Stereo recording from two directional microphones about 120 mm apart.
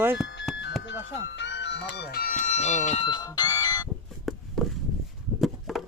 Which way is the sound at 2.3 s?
85° left.